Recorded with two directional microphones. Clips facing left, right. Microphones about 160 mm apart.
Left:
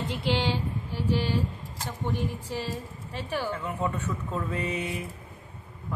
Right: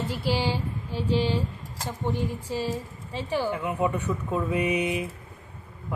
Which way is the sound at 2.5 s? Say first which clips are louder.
Right 4 dB; 15° right (ahead or behind).